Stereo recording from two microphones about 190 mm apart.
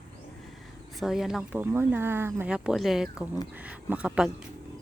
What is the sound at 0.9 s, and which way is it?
Speech, centre (ahead or behind).